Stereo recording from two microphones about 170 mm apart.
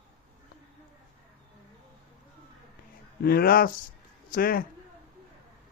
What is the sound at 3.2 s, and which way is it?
Speech, 60° left (ahead or behind).